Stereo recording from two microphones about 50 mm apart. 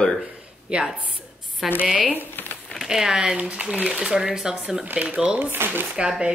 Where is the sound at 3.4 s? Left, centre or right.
Right.